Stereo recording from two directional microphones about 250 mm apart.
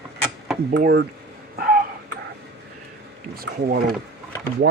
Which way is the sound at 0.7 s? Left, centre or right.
Right.